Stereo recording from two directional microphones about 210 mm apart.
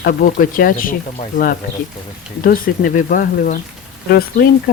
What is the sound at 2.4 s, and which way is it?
Speech, 40° left (ahead or behind).